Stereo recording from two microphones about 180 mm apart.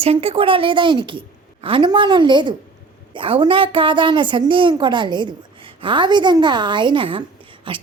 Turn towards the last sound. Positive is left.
turn(degrees=-30)  # may be behind; listen again after turning